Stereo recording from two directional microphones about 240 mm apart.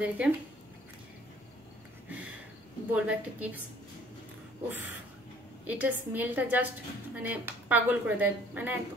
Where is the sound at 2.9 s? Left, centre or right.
Centre.